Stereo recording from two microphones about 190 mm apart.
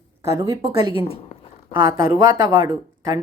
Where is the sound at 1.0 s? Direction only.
30° left (ahead or behind).